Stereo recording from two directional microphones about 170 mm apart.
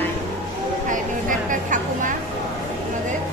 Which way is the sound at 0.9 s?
50° right (ahead or behind).